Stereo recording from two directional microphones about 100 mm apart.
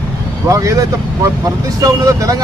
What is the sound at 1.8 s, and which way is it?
Speech, 35° right (ahead or behind).